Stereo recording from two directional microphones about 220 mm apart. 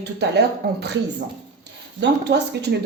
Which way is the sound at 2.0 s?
50° right (ahead or behind).